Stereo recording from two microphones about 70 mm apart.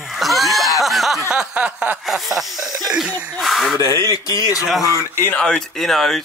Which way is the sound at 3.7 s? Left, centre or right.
Right.